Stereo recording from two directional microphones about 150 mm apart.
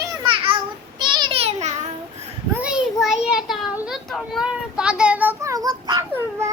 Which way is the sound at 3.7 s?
5° right (ahead or behind).